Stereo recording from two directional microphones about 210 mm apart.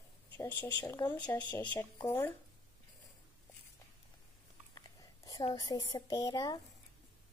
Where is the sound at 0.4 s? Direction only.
10° left (ahead or behind).